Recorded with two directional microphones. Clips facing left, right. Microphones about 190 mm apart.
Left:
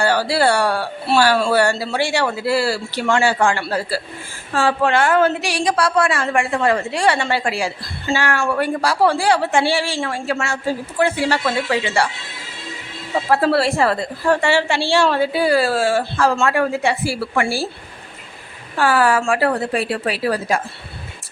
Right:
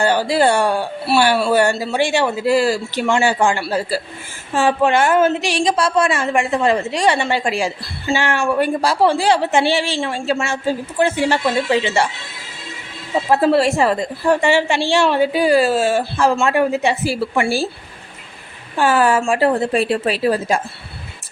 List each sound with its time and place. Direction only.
0.0 s a woman's voice: 20° right (ahead or behind)
13.3 s a woman's voice: 15° right (ahead or behind)
18.8 s a woman's voice: 20° right (ahead or behind)